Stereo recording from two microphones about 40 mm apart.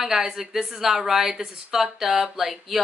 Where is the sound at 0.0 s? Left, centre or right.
Centre.